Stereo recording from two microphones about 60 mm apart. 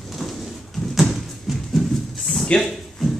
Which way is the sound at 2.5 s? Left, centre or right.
Centre.